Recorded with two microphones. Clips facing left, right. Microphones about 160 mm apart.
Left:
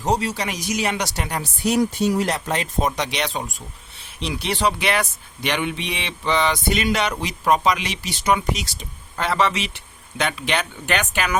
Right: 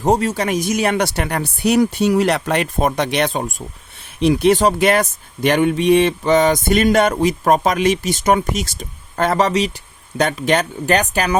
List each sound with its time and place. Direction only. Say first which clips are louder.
0.0 s speech: right 6 dB; 50° right (ahead or behind)